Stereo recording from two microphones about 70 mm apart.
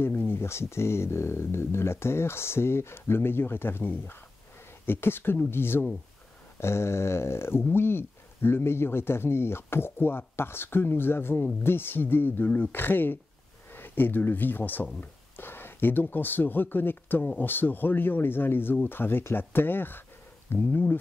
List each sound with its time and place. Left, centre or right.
0.0 s speech: left